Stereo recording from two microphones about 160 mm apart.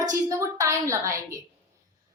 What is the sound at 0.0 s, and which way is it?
A woman's voice, 20° right (ahead or behind).